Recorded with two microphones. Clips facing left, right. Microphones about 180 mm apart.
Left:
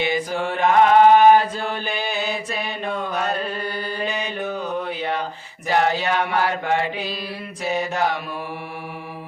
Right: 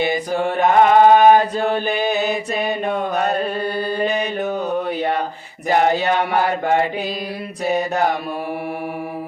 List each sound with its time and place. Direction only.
0.0 s mantra: 40° right (ahead or behind)
3.0 s chant: 35° right (ahead or behind)
4.0 s mantra: 40° right (ahead or behind)
5.6 s a sound: 40° right (ahead or behind)